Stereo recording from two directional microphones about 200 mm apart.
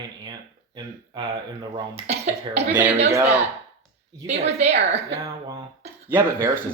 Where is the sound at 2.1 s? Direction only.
30° right (ahead or behind).